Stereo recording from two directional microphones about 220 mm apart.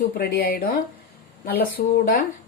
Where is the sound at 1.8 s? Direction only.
40° left (ahead or behind).